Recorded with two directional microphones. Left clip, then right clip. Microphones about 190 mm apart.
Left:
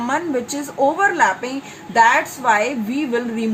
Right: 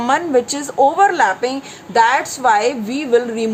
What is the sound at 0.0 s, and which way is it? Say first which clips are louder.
A woman's voice: right 6 dB; 50° right (ahead or behind).